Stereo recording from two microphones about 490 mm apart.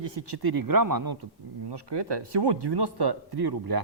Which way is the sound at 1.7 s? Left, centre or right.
Right.